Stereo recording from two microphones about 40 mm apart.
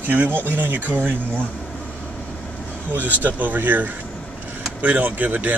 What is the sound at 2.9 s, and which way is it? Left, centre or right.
Speech, right.